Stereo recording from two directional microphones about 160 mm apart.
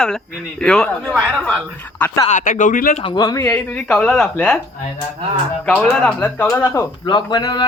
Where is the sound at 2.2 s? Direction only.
55° left (ahead or behind).